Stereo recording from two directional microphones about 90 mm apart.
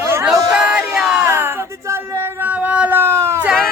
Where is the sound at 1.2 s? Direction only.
25° right (ahead or behind).